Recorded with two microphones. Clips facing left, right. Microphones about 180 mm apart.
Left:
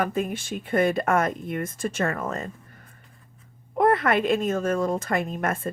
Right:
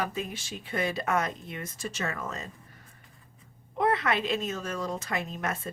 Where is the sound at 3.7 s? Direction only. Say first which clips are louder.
Left 6 dB; 50° left (ahead or behind).